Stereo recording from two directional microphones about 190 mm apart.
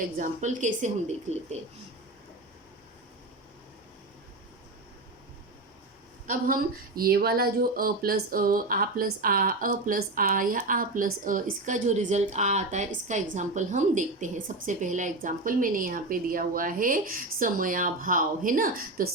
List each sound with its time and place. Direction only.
0.2 s a woman's voice: 40° right (ahead or behind)
6.2 s speech: 45° right (ahead or behind)